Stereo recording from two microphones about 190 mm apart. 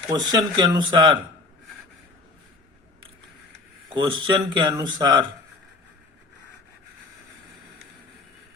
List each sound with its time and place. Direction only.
0.1 s speech: 20° right (ahead or behind)
3.9 s speech: 25° right (ahead or behind)